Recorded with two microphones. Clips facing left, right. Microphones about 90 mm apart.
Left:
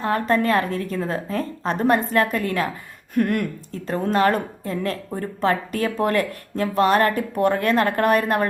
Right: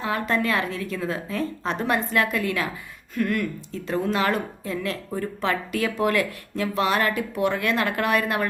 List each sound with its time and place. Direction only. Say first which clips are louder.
0.0 s a woman's voice: left 4 dB; 45° left (ahead or behind)